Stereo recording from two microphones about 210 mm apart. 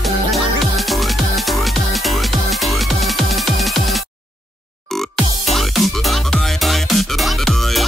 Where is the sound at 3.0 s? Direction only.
Centre (ahead or behind).